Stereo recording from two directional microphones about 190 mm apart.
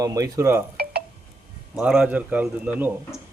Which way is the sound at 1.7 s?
5° right (ahead or behind).